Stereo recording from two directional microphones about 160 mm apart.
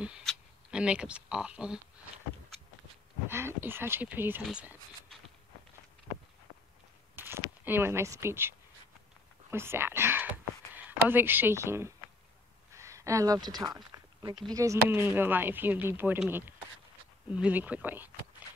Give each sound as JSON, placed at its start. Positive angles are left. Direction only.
{"t": 0.0, "sound": "speech", "side_deg": 0}
{"t": 3.3, "sound": "speech", "side_deg": -15}
{"t": 7.2, "sound": "a sound", "side_deg": -15}
{"t": 7.6, "sound": "speech", "side_deg": -15}
{"t": 9.5, "sound": "whispering", "side_deg": -15}
{"t": 10.9, "sound": "speech", "side_deg": -10}
{"t": 12.7, "sound": "a sound", "side_deg": -20}
{"t": 14.5, "sound": "speech", "side_deg": -20}